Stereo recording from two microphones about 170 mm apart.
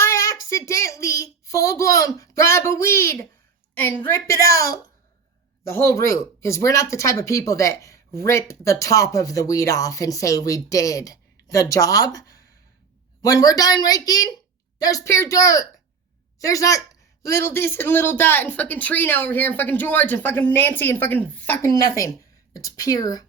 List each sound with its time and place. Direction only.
0.0 s child singing: 20° left (ahead or behind)
3.8 s speech: 10° left (ahead or behind)